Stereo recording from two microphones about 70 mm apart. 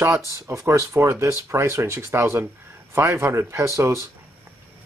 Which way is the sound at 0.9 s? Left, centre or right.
Right.